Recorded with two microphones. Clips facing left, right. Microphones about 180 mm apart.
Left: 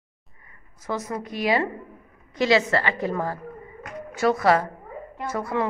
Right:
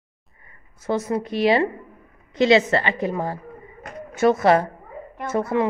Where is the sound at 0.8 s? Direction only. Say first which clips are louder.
Right 6 dB; 30° right (ahead or behind).